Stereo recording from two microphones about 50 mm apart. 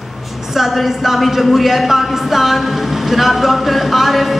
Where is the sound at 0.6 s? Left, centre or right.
Centre.